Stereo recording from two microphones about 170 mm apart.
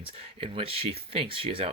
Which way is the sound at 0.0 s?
30° right (ahead or behind).